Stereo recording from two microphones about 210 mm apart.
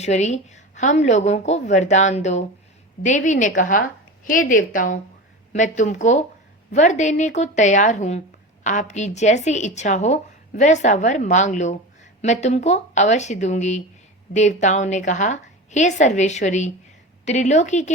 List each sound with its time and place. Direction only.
0.0 s a woman's voice: 30° left (ahead or behind)